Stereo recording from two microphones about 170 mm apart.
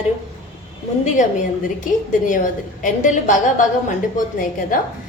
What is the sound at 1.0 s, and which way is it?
A woman's voice, 45° left (ahead or behind).